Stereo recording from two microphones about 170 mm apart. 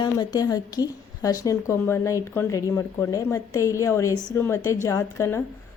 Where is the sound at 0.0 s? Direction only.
25° left (ahead or behind).